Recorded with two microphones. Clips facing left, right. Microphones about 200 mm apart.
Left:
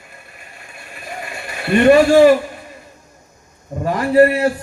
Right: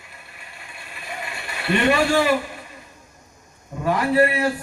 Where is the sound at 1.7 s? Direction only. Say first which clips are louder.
Left 9 dB; 45° left (ahead or behind).